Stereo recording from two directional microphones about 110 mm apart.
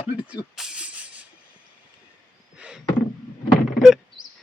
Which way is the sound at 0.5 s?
5° right (ahead or behind).